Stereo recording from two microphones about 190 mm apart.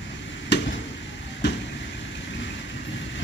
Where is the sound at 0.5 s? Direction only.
65° left (ahead or behind).